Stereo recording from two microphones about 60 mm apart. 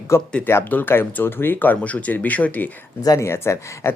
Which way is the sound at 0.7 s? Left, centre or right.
Left.